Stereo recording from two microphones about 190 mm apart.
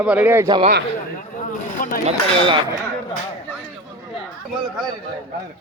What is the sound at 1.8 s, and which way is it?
Speech, 45° left (ahead or behind).